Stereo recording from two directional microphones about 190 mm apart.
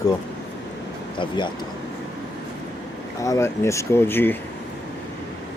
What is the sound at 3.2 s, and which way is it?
Speech, 15° left (ahead or behind).